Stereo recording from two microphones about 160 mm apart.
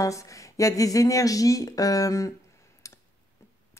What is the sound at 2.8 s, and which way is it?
Clicking, 20° left (ahead or behind).